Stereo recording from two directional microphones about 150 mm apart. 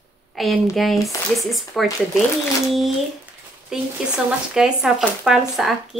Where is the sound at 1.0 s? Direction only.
Centre (ahead or behind).